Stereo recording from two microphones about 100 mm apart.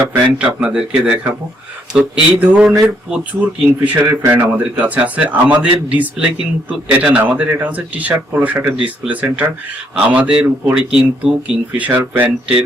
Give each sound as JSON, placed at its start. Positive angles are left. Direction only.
{"t": 0.1, "sound": "a man's voice", "side_deg": -10}
{"t": 3.7, "sound": "speech", "side_deg": -30}
{"t": 4.3, "sound": "a man's voice", "side_deg": -15}